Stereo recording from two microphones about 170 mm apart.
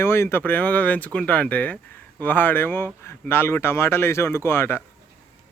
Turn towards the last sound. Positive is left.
turn(degrees=15)  # may be behind; listen again after turning